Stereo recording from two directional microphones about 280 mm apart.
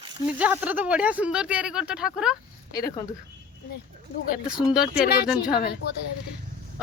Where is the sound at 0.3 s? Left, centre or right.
Centre.